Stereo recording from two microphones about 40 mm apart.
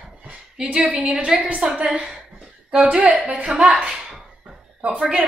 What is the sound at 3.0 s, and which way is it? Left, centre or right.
Speech, right.